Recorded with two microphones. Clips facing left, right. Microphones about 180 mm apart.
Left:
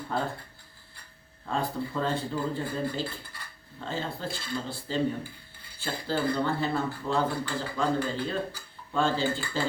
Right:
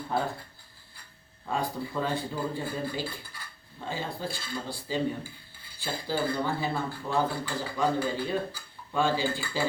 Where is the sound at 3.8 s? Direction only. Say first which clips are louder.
Even; 10° right (ahead or behind).